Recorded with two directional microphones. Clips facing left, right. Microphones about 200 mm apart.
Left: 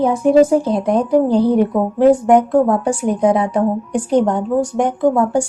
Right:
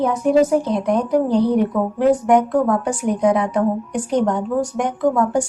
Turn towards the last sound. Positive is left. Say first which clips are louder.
# left 3 dB
turn(degrees=30)  # may be behind; listen again after turning